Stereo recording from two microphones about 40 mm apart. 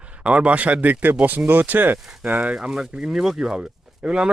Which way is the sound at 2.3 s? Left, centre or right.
Right.